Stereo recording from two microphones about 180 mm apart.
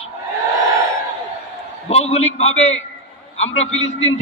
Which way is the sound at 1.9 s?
35° left (ahead or behind).